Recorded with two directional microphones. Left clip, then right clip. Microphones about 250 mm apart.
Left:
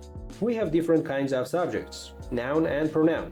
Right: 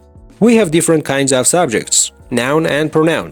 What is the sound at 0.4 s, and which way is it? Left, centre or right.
Speech, right.